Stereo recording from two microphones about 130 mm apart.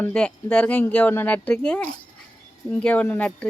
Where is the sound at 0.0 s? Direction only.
10° left (ahead or behind).